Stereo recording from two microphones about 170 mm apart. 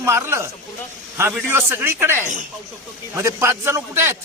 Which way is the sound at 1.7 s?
15° right (ahead or behind).